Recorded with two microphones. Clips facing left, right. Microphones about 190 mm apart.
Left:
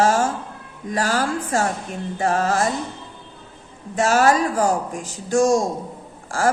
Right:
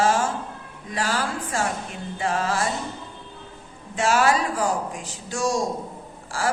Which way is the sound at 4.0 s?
45° left (ahead or behind).